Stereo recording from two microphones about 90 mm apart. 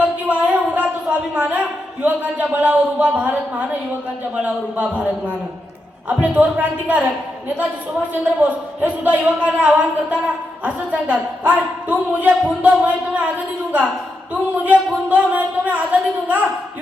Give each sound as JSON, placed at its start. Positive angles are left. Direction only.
{"t": 0.0, "sound": "a man's voice", "side_deg": -15}
{"t": 14.5, "sound": "a man's voice", "side_deg": -15}